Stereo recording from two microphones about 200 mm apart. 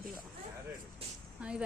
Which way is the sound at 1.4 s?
5° right (ahead or behind).